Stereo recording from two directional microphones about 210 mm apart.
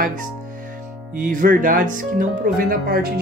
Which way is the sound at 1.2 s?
40° right (ahead or behind).